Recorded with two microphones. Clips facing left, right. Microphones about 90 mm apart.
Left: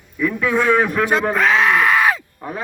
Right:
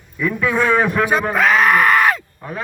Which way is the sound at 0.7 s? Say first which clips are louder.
Left 1 dB; 30° right (ahead or behind).